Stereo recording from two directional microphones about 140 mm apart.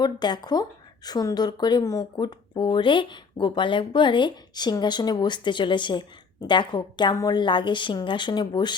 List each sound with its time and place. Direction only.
0.0 s speech: 30° left (ahead or behind)